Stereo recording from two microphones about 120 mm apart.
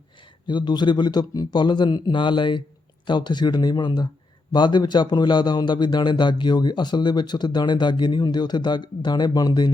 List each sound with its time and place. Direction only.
0.4 s a man's voice: 40° left (ahead or behind)